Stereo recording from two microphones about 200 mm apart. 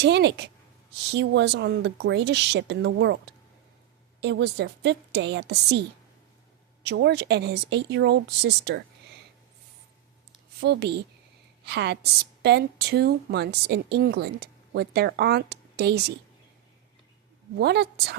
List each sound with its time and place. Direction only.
0.0 s a woman's voice: 60° right (ahead or behind)
6.8 s a woman's voice: 60° right (ahead or behind)
10.6 s a woman's voice: 55° right (ahead or behind)
17.6 s a woman's voice: 55° right (ahead or behind)